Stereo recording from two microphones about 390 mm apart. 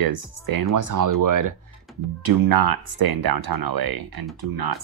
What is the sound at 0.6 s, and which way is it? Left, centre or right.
Speech, right.